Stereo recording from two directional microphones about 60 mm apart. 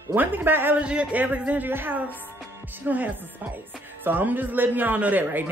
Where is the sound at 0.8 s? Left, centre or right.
Centre.